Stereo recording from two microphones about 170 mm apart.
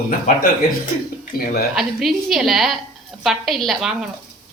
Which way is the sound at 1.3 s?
60° left (ahead or behind).